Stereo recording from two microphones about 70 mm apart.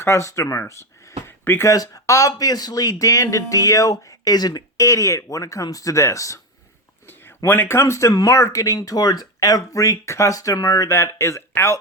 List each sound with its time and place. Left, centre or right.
0.0 s speech: left
1.6 s speech: left
4.8 s speech: left
7.1 s a sound: left
7.8 s speech: left